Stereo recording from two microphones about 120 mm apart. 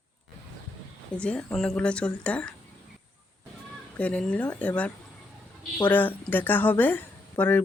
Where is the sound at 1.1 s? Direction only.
10° left (ahead or behind).